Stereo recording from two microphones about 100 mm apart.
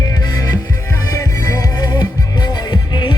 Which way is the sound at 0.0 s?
40° left (ahead or behind).